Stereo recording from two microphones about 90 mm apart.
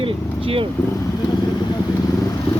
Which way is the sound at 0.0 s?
90° right.